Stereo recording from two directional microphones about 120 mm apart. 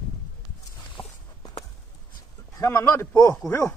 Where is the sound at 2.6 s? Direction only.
25° left (ahead or behind).